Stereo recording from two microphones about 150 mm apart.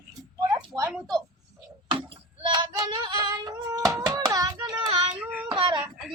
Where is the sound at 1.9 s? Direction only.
35° right (ahead or behind).